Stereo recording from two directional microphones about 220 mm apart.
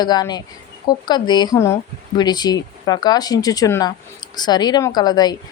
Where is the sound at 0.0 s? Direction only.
20° left (ahead or behind).